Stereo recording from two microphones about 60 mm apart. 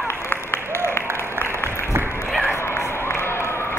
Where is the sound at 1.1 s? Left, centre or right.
Left.